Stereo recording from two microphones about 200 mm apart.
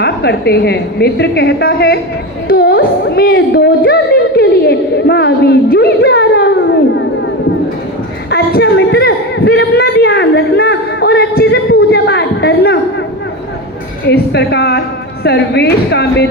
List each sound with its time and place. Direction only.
0.0 s a woman's voice: 55° left (ahead or behind)
8.3 s a sound: 50° left (ahead or behind)
14.1 s a woman's voice: 55° left (ahead or behind)